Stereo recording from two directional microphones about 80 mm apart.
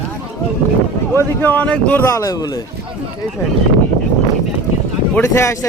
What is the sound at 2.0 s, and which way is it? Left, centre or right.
Speech, left.